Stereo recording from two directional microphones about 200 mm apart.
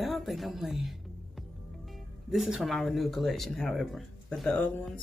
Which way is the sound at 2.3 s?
Centre (ahead or behind).